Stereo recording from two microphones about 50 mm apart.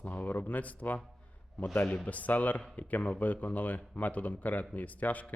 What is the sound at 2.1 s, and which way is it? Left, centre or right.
Speech, left.